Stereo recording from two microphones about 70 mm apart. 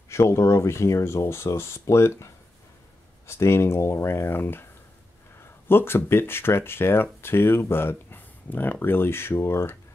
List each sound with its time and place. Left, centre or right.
0.1 s speech: left
3.3 s speech: left
5.7 s speech: left